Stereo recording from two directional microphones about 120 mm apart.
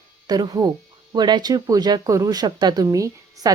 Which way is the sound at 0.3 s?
35° right (ahead or behind).